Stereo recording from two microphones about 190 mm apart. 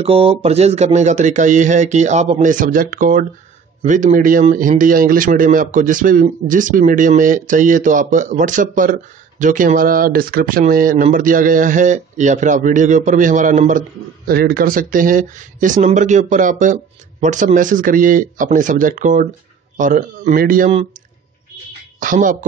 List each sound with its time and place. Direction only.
0.0 s speech: 30° right (ahead or behind); by 20.7 s 45° right (ahead or behind)
22.0 s speech: 45° right (ahead or behind)